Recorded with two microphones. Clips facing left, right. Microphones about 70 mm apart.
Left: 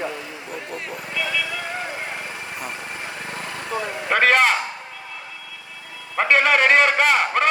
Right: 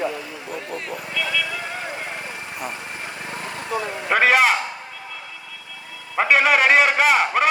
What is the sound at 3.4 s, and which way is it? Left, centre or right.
Vehicle, right.